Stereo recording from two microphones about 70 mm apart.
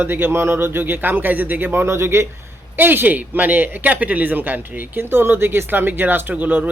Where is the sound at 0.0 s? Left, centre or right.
Right.